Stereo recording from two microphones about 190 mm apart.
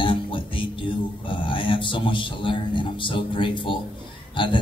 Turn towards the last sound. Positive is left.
turn(degrees=25)  # may be behind; listen again after turning